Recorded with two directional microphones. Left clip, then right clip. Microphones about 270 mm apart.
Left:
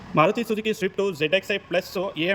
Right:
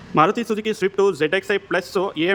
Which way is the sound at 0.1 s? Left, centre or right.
Centre.